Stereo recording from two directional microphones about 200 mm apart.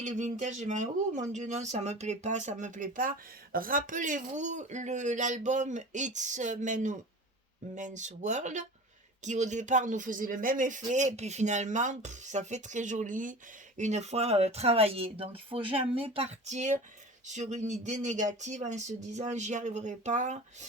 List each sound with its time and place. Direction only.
0.0 s speech: 35° right (ahead or behind)